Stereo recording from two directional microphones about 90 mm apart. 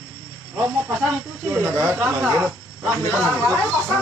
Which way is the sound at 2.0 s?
20° right (ahead or behind).